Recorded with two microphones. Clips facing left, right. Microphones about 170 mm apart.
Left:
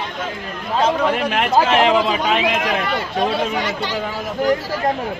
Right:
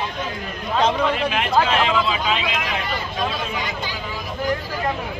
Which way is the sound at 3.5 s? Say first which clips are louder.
Left 6 dB; 80° left.